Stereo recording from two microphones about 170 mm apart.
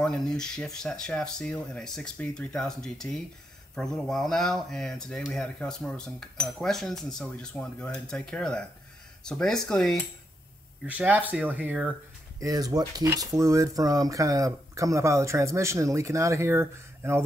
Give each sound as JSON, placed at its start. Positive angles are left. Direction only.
{"t": 0.0, "sound": "speech", "side_deg": 5}
{"t": 10.9, "sound": "speech", "side_deg": -10}
{"t": 12.4, "sound": "speech", "side_deg": -20}